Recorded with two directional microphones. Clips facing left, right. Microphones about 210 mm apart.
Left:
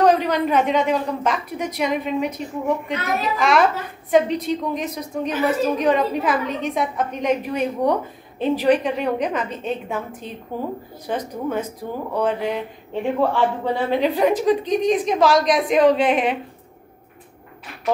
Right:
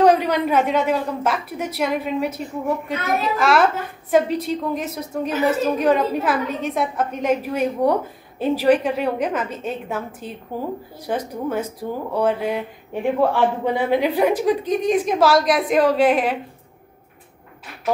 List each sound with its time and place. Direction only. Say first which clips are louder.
0.0 s a man's voice: right 1 dB; 10° right (ahead or behind)